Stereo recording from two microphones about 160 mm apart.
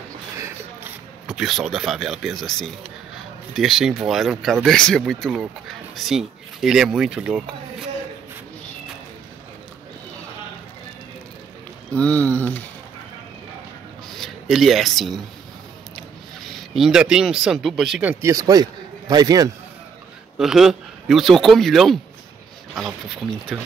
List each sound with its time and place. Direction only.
1.2 s speech: 5° right (ahead or behind)
11.9 s speech: 10° left (ahead or behind)
14.2 s speech: centre (ahead or behind)
16.7 s speech: 5° right (ahead or behind)
18.2 s a man's voice: 20° right (ahead or behind)
20.3 s a man's voice: centre (ahead or behind)